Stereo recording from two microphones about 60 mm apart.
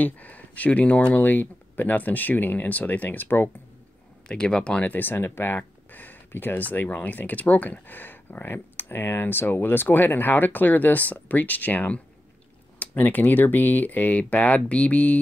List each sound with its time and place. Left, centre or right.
0.0 s speech: left
4.3 s speech: centre
4.9 s speech: left